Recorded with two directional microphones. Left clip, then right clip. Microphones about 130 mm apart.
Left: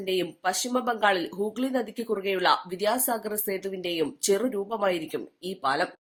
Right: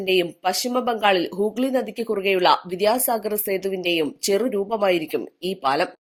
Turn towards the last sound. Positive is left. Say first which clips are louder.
# right 5 dB
turn(degrees=-50)  # may be behind; listen again after turning